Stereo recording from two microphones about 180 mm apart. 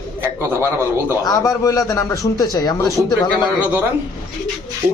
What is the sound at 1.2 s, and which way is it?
A man's voice, 20° left (ahead or behind).